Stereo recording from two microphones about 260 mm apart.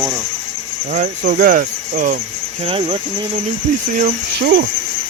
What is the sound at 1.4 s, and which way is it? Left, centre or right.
Speech, right.